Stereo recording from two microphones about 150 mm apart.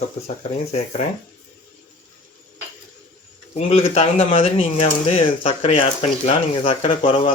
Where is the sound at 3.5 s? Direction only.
40° left (ahead or behind).